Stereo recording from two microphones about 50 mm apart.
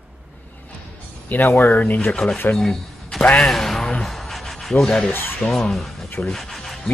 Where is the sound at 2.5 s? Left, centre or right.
Centre.